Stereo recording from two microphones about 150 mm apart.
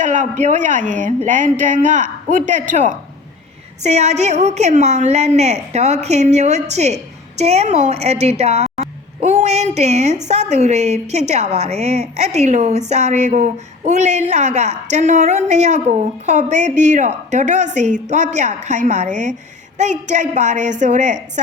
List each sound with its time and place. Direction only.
0.0 s a woman's voice: 55° right (ahead or behind)